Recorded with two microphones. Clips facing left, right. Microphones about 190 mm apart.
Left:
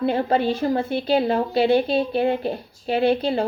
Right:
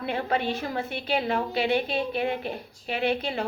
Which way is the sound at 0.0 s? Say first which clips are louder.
Left 7 dB; 35° left (ahead or behind).